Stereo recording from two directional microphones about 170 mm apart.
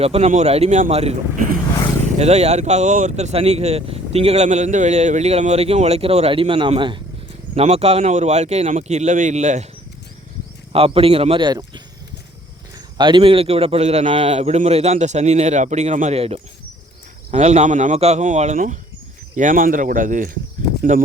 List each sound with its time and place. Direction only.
0.0 s speech: 35° right (ahead or behind)
2.1 s speech: 40° right (ahead or behind)
10.7 s speech: 35° right (ahead or behind)
13.0 s speech: 30° right (ahead or behind); by 20.3 s 50° right (ahead or behind)